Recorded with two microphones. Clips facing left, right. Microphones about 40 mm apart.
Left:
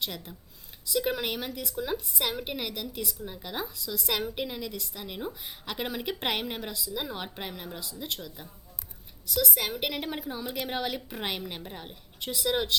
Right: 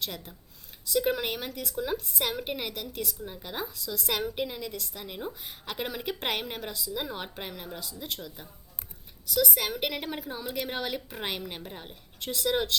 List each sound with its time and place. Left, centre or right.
0.9 s a woman's voice: centre